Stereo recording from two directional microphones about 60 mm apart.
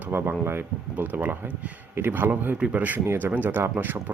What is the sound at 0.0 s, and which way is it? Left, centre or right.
Speech, right.